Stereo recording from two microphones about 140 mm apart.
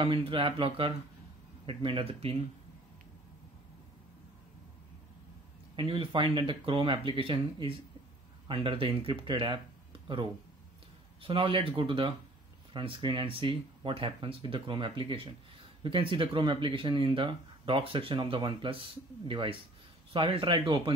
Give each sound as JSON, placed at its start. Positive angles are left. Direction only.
{"t": 0.0, "sound": "speech", "side_deg": -40}
{"t": 5.8, "sound": "speech", "side_deg": -40}
{"t": 11.2, "sound": "speech", "side_deg": -40}